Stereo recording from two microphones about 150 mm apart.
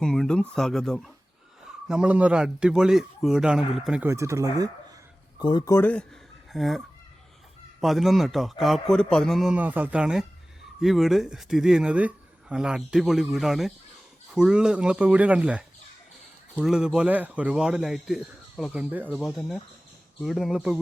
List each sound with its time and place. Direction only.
0.0 s speech: 5° left (ahead or behind)
4.0 s speech: 20° right (ahead or behind)
5.4 s speech: 30° left (ahead or behind); by 6.1 s 10° left (ahead or behind)
6.5 s speech: centre (ahead or behind)
19.1 s speech: centre (ahead or behind)